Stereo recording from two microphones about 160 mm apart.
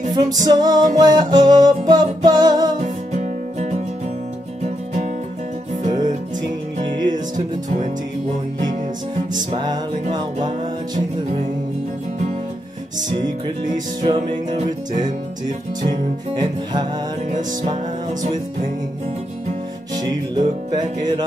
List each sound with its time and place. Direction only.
0.1 s music: 25° right (ahead or behind)
2.8 s music: 50° right (ahead or behind)
6.8 s music: 25° right (ahead or behind)
9.5 s music: 30° right (ahead or behind)
14.0 s music: 30° right (ahead or behind)
20.0 s music: 25° right (ahead or behind)